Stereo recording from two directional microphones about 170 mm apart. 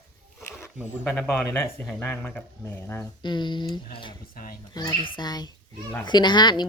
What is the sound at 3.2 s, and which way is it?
Speech, 25° left (ahead or behind).